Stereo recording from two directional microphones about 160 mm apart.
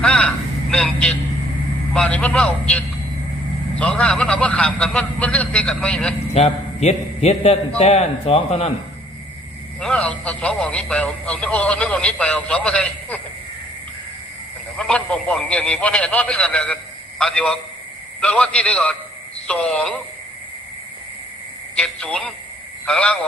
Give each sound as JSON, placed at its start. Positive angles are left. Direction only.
{"t": 0.0, "sound": "vehicle", "side_deg": 5}
{"t": 1.9, "sound": "a man's voice", "side_deg": 5}
{"t": 6.3, "sound": "a man's voice", "side_deg": 40}
{"t": 9.8, "sound": "speech", "side_deg": 5}
{"t": 14.8, "sound": "a man's voice", "side_deg": 5}
{"t": 21.8, "sound": "a man's voice", "side_deg": 5}